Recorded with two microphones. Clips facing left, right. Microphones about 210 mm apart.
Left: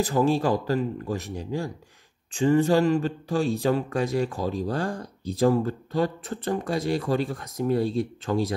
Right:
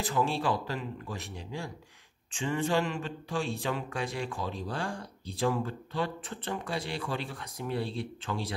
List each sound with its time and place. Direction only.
0.0 s speech: 40° left (ahead or behind)